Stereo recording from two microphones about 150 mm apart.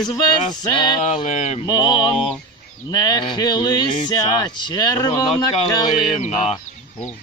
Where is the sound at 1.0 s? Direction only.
50° left (ahead or behind).